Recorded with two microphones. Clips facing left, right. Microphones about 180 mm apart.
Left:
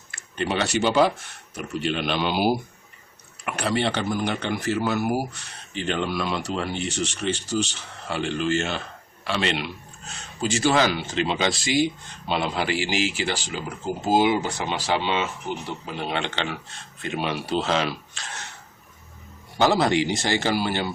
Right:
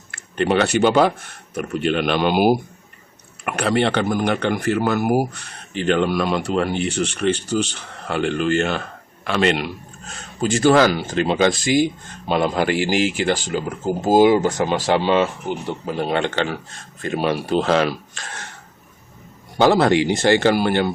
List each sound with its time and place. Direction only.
0.1 s speech: 60° right (ahead or behind)
3.4 s speech: 60° right (ahead or behind)
19.5 s speech: 60° right (ahead or behind)